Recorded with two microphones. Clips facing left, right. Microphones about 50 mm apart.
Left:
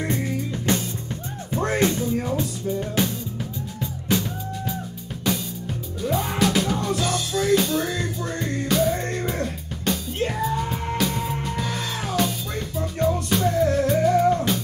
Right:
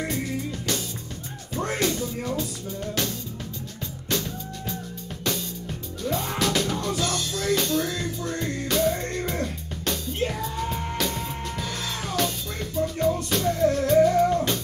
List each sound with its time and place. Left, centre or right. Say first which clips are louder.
0.5 s music: left 5 dB; left; by 4.7 s centre
6.0 s music: left 3 dB; centre